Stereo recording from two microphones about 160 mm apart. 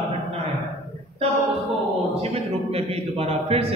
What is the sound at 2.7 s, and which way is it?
Speech, 40° right (ahead or behind).